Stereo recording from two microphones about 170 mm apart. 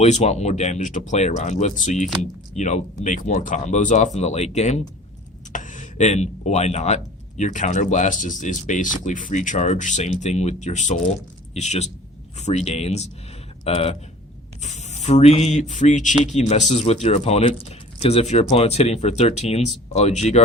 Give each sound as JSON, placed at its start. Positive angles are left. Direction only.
{"t": 0.0, "sound": "speech", "side_deg": 40}